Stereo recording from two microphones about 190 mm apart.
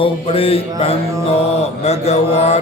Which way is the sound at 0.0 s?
30° left (ahead or behind).